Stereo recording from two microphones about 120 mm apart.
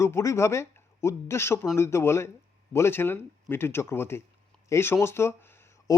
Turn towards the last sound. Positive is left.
turn(degrees=30)  # may be behind; listen again after turning